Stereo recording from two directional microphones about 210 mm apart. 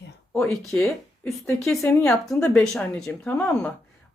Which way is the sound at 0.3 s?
Centre (ahead or behind).